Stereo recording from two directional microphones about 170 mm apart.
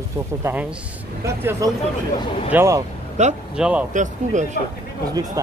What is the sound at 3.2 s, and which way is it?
Speech, 45° right (ahead or behind).